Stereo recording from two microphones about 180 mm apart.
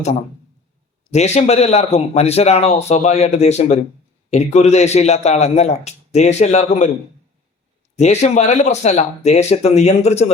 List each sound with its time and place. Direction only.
1.1 s a man's voice: 35° left (ahead or behind)
7.9 s a man's voice: 40° left (ahead or behind)